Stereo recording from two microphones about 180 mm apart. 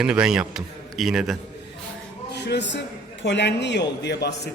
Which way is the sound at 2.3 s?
70° left (ahead or behind).